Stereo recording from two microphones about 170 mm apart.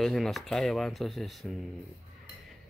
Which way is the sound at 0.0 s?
Centre (ahead or behind).